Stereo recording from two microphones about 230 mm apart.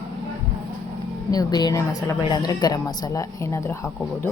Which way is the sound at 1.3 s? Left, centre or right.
Centre.